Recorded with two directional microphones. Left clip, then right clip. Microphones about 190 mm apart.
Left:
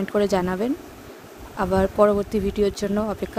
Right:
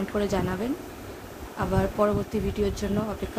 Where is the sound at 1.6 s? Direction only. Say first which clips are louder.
Left 6 dB; 45° left (ahead or behind).